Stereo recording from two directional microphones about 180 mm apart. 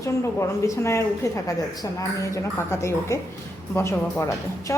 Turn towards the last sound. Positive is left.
turn(degrees=15)  # may be behind; listen again after turning